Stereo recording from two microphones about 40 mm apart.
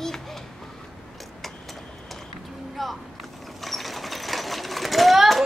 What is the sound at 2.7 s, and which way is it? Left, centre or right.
Sewing machine, centre.